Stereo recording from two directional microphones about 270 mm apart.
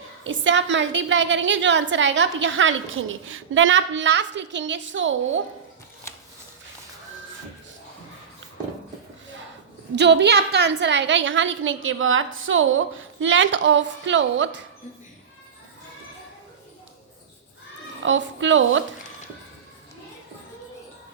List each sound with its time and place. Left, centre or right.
0.3 s a woman's voice: right
9.9 s a woman's voice: right
18.0 s a woman's voice: right